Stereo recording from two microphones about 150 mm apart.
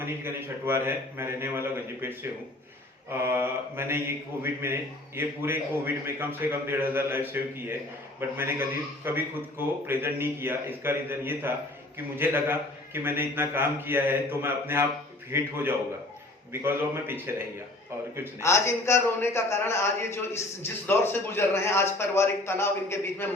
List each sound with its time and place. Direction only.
0.0 s a man's voice: 15° right (ahead or behind)
18.3 s a man's voice: 20° left (ahead or behind)